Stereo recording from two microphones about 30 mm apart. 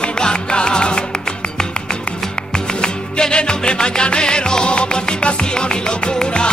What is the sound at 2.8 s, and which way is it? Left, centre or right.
Music, left.